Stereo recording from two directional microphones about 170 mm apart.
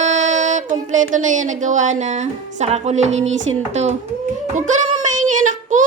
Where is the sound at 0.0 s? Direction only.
45° right (ahead or behind).